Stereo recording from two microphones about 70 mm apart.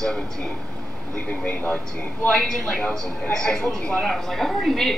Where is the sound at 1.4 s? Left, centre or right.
Left.